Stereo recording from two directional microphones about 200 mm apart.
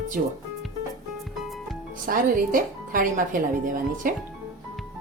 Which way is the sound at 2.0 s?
45° right (ahead or behind).